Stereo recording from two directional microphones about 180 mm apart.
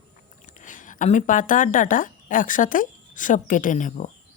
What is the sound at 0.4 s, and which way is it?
Speech, 45° left (ahead or behind).